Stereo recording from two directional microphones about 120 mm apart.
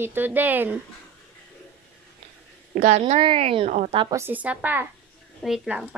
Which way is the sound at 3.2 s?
50° right (ahead or behind).